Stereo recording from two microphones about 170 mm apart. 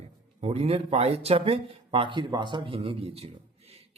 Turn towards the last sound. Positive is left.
turn(degrees=-35)  # may be behind; listen again after turning